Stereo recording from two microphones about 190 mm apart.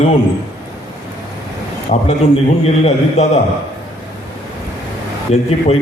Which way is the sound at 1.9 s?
40° left (ahead or behind).